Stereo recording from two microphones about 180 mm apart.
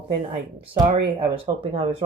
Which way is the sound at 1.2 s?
30° right (ahead or behind).